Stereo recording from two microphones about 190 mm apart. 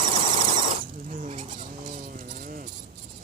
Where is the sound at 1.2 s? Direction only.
40° right (ahead or behind).